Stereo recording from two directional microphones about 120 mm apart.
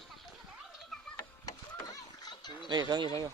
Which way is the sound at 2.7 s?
35° right (ahead or behind).